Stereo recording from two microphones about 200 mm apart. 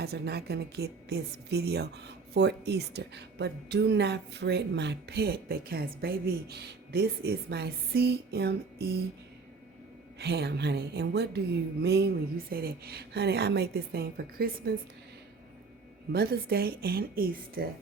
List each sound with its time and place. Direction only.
0.0 s a woman's voice: 50° right (ahead or behind)
10.2 s a woman's voice: 55° right (ahead or behind)
16.1 s a woman's voice: 50° right (ahead or behind)